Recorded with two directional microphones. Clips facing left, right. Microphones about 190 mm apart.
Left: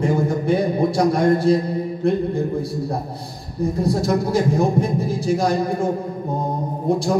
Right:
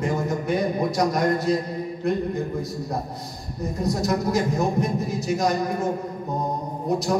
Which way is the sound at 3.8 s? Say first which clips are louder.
Left 1 dB; 30° left (ahead or behind).